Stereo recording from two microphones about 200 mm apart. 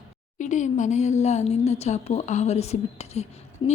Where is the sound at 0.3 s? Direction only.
40° left (ahead or behind).